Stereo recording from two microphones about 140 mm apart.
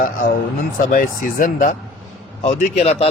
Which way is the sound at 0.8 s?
75° left (ahead or behind).